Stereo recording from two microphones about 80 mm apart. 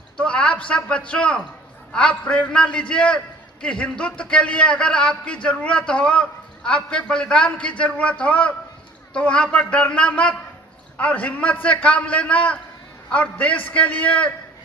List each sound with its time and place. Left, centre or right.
0.2 s a man's voice: centre